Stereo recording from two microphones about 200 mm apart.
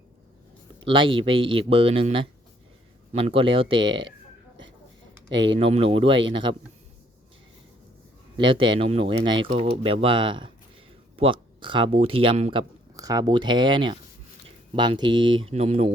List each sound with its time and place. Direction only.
0.9 s speech: 25° right (ahead or behind)
5.5 s speech: 30° right (ahead or behind)
8.4 s speech: 25° right (ahead or behind)